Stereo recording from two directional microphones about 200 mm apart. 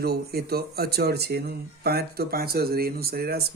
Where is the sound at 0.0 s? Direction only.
50° right (ahead or behind).